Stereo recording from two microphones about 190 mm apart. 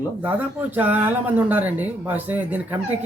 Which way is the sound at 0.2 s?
10° right (ahead or behind).